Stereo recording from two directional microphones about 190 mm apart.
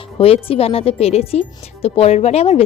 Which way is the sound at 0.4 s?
30° left (ahead or behind).